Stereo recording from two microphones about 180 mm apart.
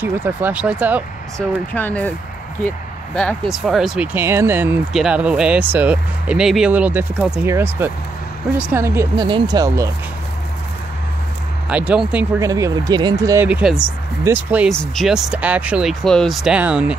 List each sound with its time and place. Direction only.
0.0 s speech: 10° right (ahead or behind)
1.7 s speech: 10° left (ahead or behind)
3.2 s speech: centre (ahead or behind); by 9.8 s 20° right (ahead or behind)
11.7 s speech: 5° right (ahead or behind)
12.4 s speech: 20° right (ahead or behind)
13.5 s speech: 5° right (ahead or behind)
14.7 s speech: 5° left (ahead or behind)